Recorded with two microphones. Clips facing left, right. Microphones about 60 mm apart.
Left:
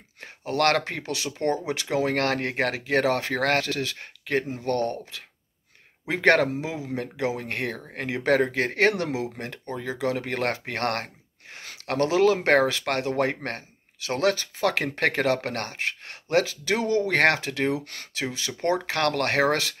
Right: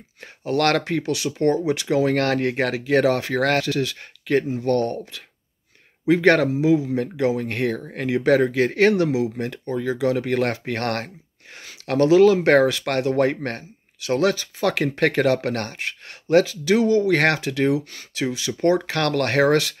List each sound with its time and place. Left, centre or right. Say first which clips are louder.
0.2 s speech: right 3 dB; left
6.0 s speech: right 4 dB; left
8.2 s speech: right 4 dB; left
18.9 s speech: right 2 dB; left